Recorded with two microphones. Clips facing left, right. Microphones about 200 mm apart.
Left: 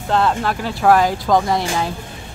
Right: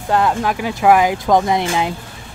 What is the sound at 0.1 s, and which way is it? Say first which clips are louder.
Speech: right 1 dB; 10° right (ahead or behind).